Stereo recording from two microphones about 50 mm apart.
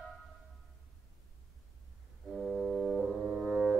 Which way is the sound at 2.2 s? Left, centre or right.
Centre.